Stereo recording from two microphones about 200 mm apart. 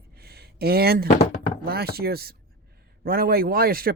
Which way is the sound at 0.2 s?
50° right (ahead or behind).